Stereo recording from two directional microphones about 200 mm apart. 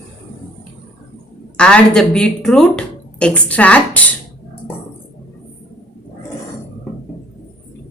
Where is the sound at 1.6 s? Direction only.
5° left (ahead or behind).